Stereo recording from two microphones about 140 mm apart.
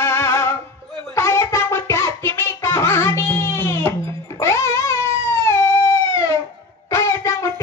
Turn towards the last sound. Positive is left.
turn(degrees=20)  # may be behind; listen again after turning